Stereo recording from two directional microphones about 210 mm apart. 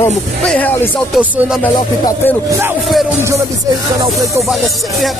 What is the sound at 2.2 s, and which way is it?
Speech, 10° left (ahead or behind).